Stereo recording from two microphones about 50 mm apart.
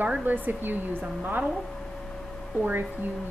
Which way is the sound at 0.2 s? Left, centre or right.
Right.